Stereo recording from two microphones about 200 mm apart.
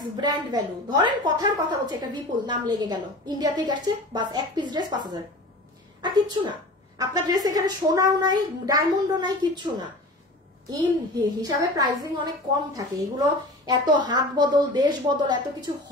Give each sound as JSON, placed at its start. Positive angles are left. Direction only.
{"t": 0.0, "sound": "a woman's voice", "side_deg": -20}
{"t": 11.4, "sound": "a woman's voice", "side_deg": -20}